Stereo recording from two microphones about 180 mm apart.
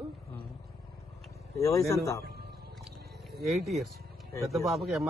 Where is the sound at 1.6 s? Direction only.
20° left (ahead or behind).